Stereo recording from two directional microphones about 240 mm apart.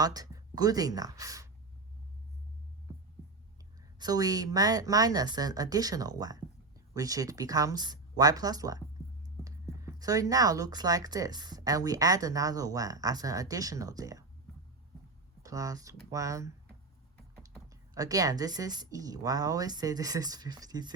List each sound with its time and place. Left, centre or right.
0.0 s speech: centre
3.9 s speech: centre
9.8 s speech: centre
15.4 s speech: centre